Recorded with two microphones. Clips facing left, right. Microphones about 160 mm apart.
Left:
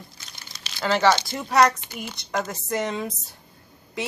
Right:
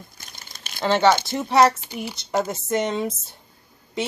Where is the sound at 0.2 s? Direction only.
50° right (ahead or behind).